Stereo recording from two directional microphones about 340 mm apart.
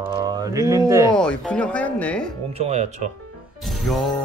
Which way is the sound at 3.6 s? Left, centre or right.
Centre.